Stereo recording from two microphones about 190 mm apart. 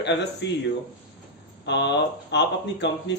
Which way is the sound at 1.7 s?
65° left (ahead or behind).